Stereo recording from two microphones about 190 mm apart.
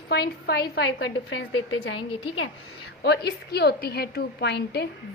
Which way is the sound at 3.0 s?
60° left (ahead or behind).